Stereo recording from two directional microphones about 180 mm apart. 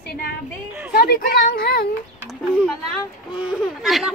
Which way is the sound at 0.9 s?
55° left (ahead or behind).